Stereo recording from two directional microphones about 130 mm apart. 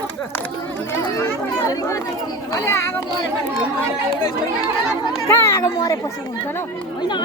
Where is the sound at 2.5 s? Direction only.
25° left (ahead or behind).